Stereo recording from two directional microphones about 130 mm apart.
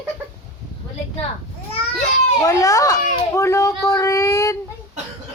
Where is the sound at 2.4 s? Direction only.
25° left (ahead or behind).